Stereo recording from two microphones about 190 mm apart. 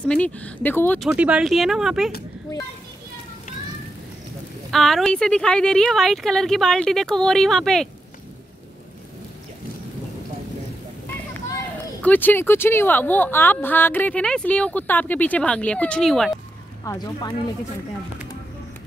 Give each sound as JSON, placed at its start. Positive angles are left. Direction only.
{"t": 0.0, "sound": "speech", "side_deg": 5}
{"t": 1.0, "sound": "speech", "side_deg": -5}
{"t": 4.6, "sound": "speech", "side_deg": 0}
{"t": 12.0, "sound": "speech", "side_deg": 10}
{"t": 16.8, "sound": "speech", "side_deg": 20}